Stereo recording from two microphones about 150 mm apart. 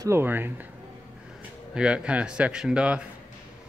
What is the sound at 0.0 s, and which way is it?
Speech, 15° right (ahead or behind).